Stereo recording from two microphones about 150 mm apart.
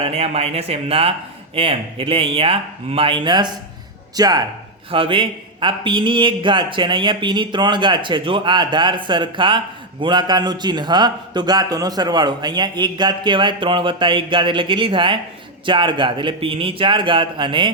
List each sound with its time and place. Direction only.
0.0 s a man's voice: 45° right (ahead or behind)